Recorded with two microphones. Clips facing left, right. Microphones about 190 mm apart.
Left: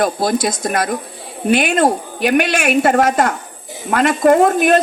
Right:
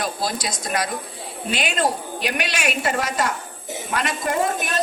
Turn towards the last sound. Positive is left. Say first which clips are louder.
# left 12 dB
turn(degrees=60)  # may be behind; listen again after turning